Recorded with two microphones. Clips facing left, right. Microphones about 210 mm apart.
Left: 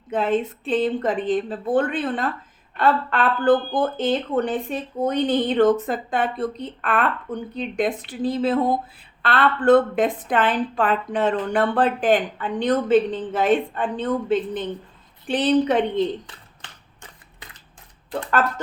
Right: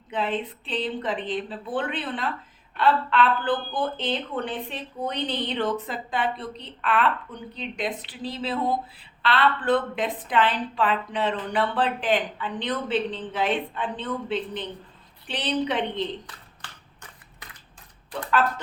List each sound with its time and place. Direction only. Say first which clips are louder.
0.1 s speech: left 6 dB; 45° left (ahead or behind)
18.3 s speech: left 1 dB; 45° left (ahead or behind)